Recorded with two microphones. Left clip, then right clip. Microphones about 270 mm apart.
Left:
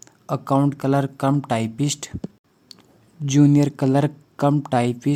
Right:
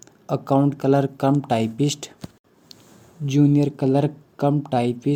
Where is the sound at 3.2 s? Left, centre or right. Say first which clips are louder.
Left 2 dB; left.